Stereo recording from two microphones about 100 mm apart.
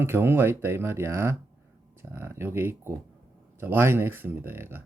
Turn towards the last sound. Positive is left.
turn(degrees=-25)  # may be behind; listen again after turning